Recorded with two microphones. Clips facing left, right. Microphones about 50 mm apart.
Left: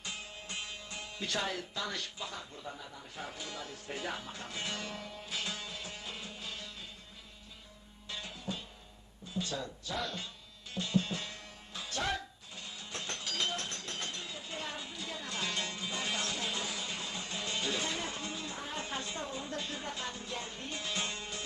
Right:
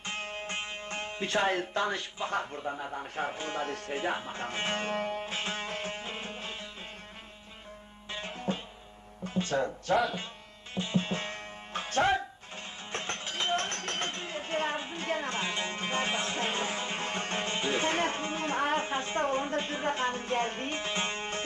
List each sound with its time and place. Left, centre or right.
0.0 s music: right
2.0 s a man's voice: right
2.3 s speech: right
3.9 s speech: right
8.1 s music: right
9.2 s speech: right
10.8 s music: right
15.7 s music: right
18.8 s a sound: right
19.2 s music: right